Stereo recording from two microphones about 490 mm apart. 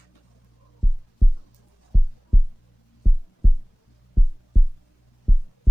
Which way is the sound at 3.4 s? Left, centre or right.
Centre.